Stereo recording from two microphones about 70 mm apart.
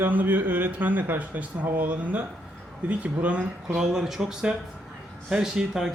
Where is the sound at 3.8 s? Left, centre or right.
Centre.